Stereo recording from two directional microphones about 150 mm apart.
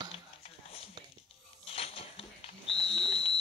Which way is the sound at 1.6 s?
40° left (ahead or behind).